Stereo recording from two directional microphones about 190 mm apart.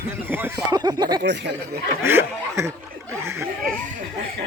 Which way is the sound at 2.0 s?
10° right (ahead or behind).